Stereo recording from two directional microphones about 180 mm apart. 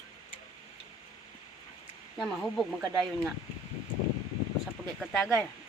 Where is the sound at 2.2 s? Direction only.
Centre (ahead or behind).